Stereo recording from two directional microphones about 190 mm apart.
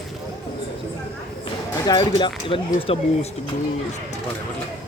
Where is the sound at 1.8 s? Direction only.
20° left (ahead or behind).